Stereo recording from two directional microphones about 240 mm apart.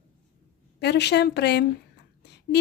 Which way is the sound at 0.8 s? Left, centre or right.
Left.